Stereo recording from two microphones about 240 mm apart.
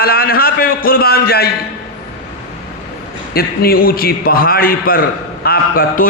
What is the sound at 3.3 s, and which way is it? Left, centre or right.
A man's voice, left.